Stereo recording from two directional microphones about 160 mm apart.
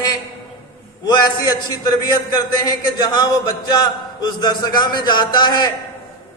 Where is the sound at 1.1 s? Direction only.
25° left (ahead or behind).